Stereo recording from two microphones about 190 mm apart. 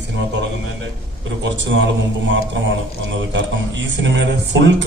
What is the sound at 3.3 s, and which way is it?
A man's voice, 70° right (ahead or behind).